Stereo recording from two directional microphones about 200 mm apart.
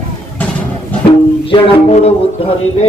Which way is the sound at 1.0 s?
25° left (ahead or behind).